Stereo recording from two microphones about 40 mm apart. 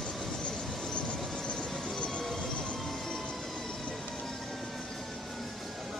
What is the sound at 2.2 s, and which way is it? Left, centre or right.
Train, centre.